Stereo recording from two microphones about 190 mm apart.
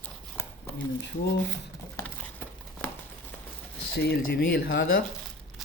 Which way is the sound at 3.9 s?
60° left (ahead or behind).